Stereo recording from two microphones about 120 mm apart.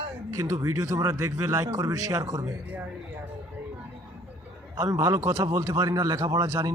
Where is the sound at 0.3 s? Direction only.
30° right (ahead or behind).